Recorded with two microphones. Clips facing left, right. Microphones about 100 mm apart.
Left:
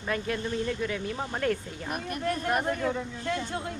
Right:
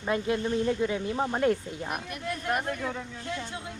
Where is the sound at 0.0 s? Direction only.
20° right (ahead or behind).